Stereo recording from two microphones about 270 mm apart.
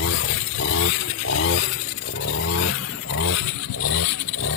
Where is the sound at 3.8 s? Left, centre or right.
Left.